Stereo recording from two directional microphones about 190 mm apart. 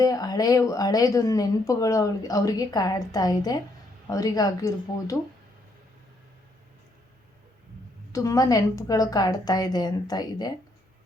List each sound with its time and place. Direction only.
0.0 s a woman's voice: 20° left (ahead or behind)
8.1 s speech: 15° left (ahead or behind)